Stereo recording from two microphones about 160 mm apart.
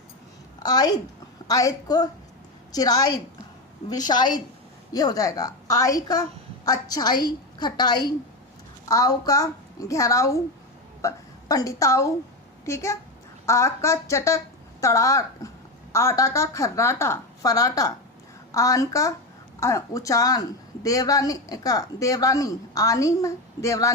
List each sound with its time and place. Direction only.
0.6 s a woman's voice: 25° left (ahead or behind)